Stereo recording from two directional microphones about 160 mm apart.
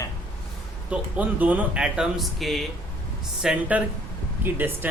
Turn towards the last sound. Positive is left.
turn(degrees=-15)  # may be behind; listen again after turning